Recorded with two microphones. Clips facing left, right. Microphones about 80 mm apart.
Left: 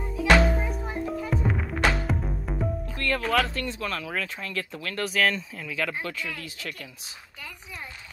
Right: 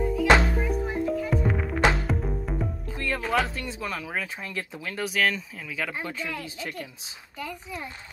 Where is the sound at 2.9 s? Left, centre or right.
Centre.